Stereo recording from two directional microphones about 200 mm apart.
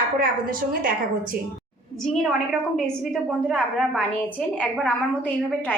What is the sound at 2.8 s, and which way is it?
A woman's voice, 5° left (ahead or behind).